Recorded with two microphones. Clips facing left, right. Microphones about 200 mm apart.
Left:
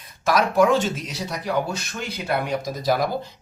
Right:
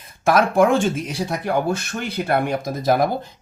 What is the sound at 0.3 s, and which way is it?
Speech, 55° right (ahead or behind).